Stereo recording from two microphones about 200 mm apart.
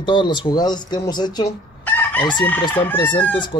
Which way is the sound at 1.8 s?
10° left (ahead or behind).